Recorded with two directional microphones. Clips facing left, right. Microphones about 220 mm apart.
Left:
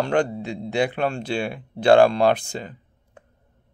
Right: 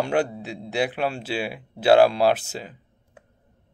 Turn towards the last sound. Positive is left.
turn(degrees=-5)  # may be behind; listen again after turning